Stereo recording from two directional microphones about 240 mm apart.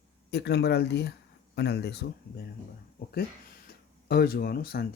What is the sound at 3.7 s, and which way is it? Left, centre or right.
Speech, left.